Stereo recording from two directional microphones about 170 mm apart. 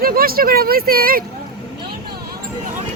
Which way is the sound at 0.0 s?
60° right (ahead or behind).